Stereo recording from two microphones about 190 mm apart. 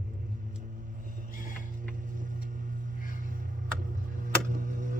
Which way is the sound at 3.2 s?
45° right (ahead or behind).